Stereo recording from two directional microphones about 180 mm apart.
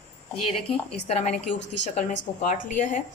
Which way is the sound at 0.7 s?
35° left (ahead or behind).